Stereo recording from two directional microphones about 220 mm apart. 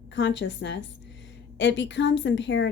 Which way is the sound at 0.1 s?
55° left (ahead or behind).